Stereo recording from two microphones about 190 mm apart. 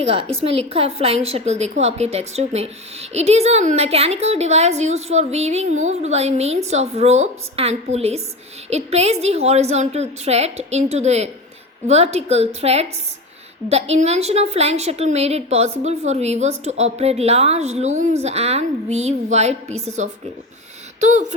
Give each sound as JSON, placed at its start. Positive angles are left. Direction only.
{"t": 0.0, "sound": "a woman's voice", "side_deg": -30}